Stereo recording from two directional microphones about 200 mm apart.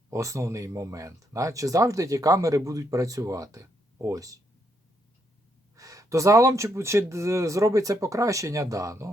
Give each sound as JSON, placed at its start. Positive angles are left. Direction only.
{"t": 0.1, "sound": "speech", "side_deg": -15}
{"t": 5.7, "sound": "gasp", "side_deg": -15}
{"t": 6.7, "sound": "speech", "side_deg": -15}